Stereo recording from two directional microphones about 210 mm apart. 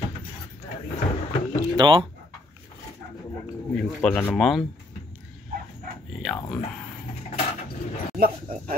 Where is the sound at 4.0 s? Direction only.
5° left (ahead or behind).